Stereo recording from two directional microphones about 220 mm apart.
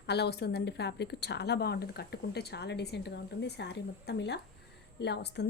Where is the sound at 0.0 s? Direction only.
50° left (ahead or behind).